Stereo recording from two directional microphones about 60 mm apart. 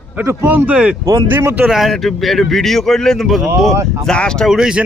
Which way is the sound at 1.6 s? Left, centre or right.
Centre.